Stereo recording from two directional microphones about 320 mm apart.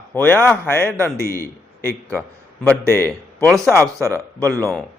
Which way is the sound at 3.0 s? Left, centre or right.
Centre.